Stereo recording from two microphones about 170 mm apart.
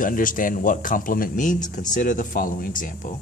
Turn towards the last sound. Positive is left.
turn(degrees=50)  # may be behind; listen again after turning